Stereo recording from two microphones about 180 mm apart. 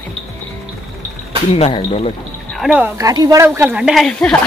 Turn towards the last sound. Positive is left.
turn(degrees=5)  # may be behind; listen again after turning